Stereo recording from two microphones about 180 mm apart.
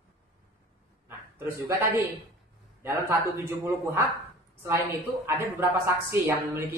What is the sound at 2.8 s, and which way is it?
Speech, 15° right (ahead or behind).